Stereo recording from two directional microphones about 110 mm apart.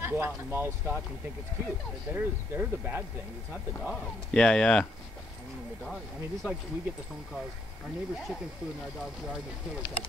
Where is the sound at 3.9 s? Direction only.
10° left (ahead or behind).